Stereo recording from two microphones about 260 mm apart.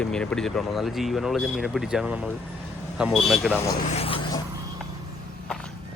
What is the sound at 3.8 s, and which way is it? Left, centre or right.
Vehicle, left.